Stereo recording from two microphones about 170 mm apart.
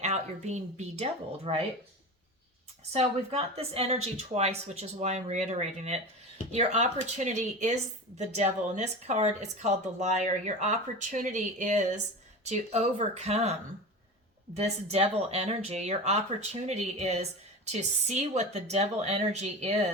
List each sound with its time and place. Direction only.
0.0 s speech: 40° right (ahead or behind)
2.9 s speech: 35° right (ahead or behind)